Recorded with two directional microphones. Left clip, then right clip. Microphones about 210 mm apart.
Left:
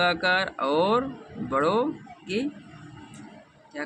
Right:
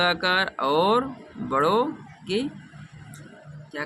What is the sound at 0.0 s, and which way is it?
Speech, 20° right (ahead or behind).